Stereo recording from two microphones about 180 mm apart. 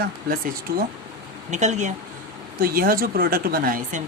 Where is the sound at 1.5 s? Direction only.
40° right (ahead or behind).